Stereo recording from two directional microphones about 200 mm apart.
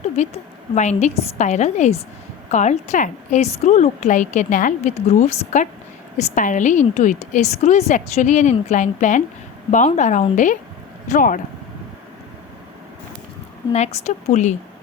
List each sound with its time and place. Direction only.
0.2 s a woman's voice: 35° left (ahead or behind)
13.7 s a woman's voice: 35° left (ahead or behind)